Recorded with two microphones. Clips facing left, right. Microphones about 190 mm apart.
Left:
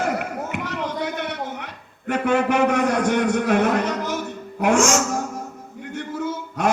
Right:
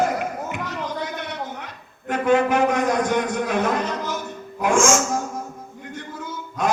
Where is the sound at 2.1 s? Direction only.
65° left (ahead or behind).